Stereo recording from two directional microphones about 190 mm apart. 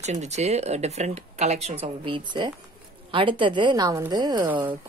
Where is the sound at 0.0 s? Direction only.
35° right (ahead or behind).